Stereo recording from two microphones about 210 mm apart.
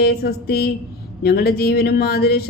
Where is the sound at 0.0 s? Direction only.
50° left (ahead or behind).